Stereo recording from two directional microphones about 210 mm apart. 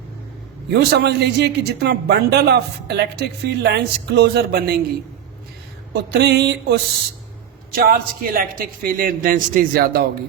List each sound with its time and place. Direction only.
0.7 s a man's voice: 50° right (ahead or behind)
5.9 s a man's voice: 50° right (ahead or behind)
7.9 s a man's voice: 40° right (ahead or behind)